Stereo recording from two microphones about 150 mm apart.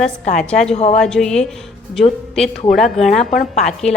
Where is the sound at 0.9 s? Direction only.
5° left (ahead or behind).